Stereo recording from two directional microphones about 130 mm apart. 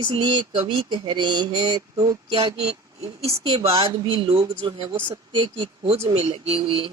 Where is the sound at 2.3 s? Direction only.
50° right (ahead or behind).